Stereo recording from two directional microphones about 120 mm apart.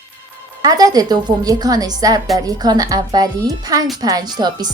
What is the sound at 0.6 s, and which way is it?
A woman's voice, 30° right (ahead or behind).